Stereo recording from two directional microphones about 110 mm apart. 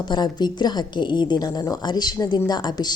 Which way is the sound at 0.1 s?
40° left (ahead or behind).